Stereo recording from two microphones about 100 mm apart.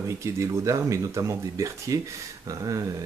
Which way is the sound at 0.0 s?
30° right (ahead or behind).